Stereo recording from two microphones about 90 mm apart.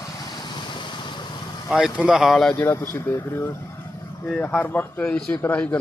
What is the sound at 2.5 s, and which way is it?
Speech, 30° left (ahead or behind).